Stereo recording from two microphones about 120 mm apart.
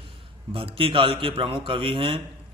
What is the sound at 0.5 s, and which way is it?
A man's voice, 50° right (ahead or behind).